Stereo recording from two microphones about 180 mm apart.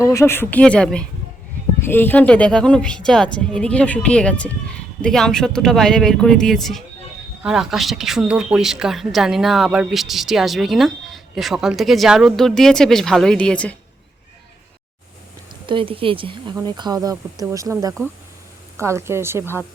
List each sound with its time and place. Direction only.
0.0 s speech: 15° left (ahead or behind)
15.6 s a woman's voice: 30° right (ahead or behind); by 19.6 s 15° right (ahead or behind)